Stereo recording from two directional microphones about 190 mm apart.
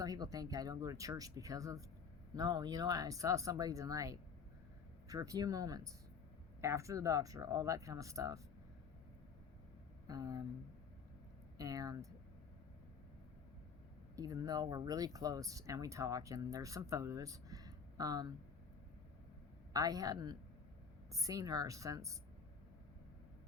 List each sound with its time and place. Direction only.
0.0 s speech: 20° right (ahead or behind)
10.1 s speech: 20° right (ahead or behind)
11.5 s speech: 20° right (ahead or behind)
14.2 s speech: 20° right (ahead or behind)
19.7 s speech: 20° right (ahead or behind)